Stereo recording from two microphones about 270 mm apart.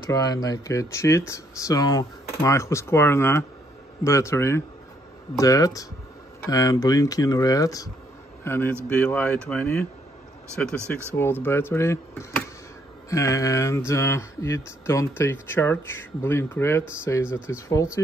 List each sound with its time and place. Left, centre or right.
0.1 s speech: centre